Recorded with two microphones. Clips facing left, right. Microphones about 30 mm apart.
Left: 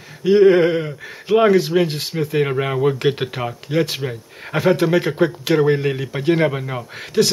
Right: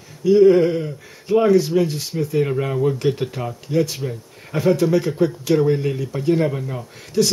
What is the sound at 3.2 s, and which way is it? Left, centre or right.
Speech, left.